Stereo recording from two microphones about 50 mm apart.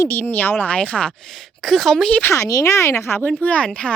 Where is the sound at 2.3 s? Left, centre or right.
Left.